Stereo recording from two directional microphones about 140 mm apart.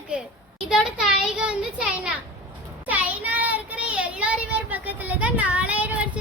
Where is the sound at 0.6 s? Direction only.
5° right (ahead or behind).